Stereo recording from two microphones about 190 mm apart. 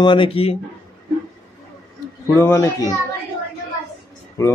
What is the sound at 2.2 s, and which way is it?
Speech, 15° left (ahead or behind).